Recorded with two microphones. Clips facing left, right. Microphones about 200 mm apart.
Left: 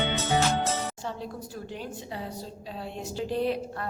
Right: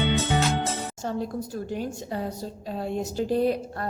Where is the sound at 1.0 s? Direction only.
45° right (ahead or behind).